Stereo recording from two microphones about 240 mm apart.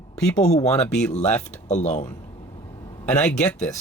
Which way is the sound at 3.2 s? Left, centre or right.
Centre.